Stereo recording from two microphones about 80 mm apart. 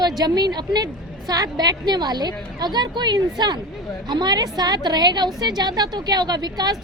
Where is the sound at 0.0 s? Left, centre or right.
Right.